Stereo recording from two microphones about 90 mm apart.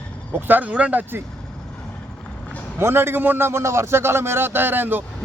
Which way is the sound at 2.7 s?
25° right (ahead or behind).